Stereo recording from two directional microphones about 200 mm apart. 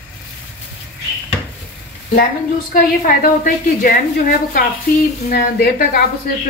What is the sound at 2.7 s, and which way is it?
A woman's voice, 45° left (ahead or behind).